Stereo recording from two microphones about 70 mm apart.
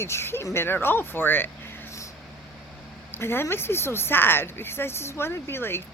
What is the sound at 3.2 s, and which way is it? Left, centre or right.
Speech, left.